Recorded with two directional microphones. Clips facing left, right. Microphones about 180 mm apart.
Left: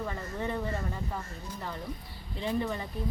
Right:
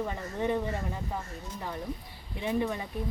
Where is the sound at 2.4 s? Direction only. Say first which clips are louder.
Right 1 dB; 15° right (ahead or behind).